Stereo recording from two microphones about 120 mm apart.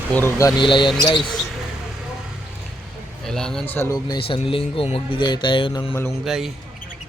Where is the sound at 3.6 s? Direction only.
15° left (ahead or behind).